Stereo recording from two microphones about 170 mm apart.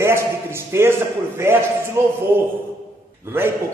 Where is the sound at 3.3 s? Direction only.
10° right (ahead or behind).